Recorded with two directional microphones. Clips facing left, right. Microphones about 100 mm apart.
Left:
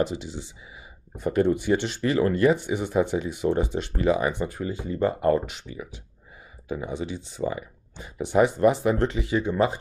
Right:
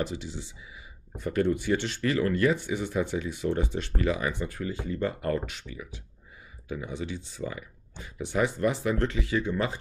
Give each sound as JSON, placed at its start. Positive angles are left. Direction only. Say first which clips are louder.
{"t": 0.0, "sound": "speech", "louder": "left 5 dB", "side_deg": 20}